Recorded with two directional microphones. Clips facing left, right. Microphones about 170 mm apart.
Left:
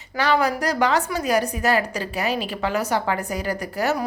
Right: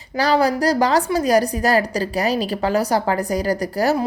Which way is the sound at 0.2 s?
35° right (ahead or behind).